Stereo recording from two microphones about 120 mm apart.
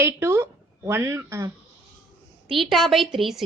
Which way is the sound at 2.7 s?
Centre (ahead or behind).